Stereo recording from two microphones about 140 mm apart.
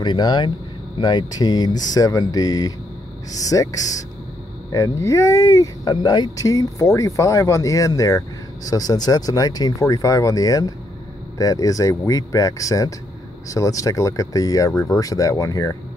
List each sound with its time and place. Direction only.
0.0 s speech: 35° left (ahead or behind)